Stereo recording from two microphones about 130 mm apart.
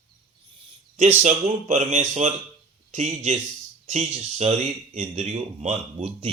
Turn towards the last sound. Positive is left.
turn(degrees=-50)  # may be behind; listen again after turning